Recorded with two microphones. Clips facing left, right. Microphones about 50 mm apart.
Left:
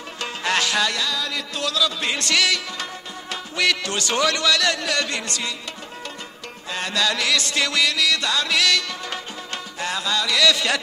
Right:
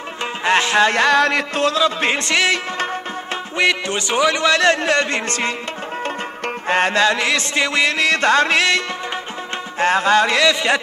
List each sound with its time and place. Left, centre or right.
0.4 s music: right
1.0 s music: right
1.5 s music: right
3.5 s speech: right
4.5 s music: right
6.7 s music: right